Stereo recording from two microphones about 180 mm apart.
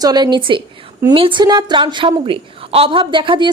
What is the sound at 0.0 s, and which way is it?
A woman's voice, 20° right (ahead or behind).